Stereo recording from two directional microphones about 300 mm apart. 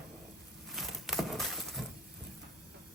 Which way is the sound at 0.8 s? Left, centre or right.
Centre.